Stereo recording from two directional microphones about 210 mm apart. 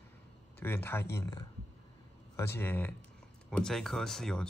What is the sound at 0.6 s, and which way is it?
Speech, 10° left (ahead or behind).